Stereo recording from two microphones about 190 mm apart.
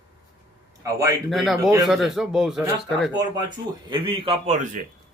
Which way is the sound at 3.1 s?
25° right (ahead or behind).